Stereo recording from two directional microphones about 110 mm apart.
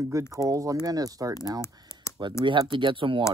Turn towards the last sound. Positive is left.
turn(degrees=-50)  # may be behind; listen again after turning